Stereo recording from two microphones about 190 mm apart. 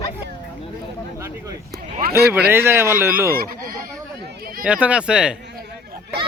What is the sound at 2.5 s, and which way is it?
Speech, 10° right (ahead or behind).